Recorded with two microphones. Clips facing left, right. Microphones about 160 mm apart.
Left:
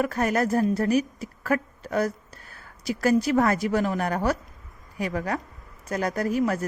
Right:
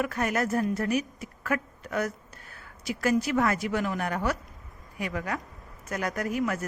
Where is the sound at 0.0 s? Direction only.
35° left (ahead or behind).